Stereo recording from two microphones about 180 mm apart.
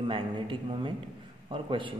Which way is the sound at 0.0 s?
30° right (ahead or behind).